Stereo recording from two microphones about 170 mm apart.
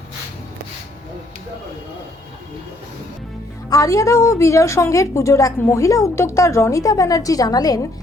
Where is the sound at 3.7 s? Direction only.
20° left (ahead or behind).